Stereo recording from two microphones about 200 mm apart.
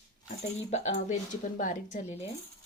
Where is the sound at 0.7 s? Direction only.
35° left (ahead or behind).